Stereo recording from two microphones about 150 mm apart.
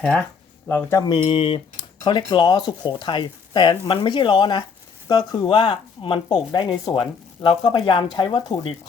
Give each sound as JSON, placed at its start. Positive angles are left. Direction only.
{"t": 0.0, "sound": "speech", "side_deg": 5}
{"t": 0.7, "sound": "speech", "side_deg": 15}
{"t": 1.0, "sound": "speech", "side_deg": 35}